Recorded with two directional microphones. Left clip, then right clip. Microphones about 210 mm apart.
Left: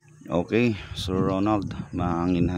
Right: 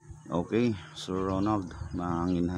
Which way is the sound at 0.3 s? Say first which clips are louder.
Left 5 dB; 40° left (ahead or behind).